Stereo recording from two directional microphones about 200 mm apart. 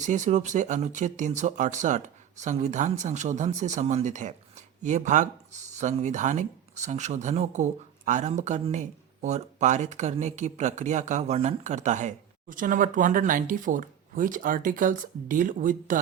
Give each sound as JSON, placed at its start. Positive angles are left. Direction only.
{"t": 0.0, "sound": "speech", "side_deg": -40}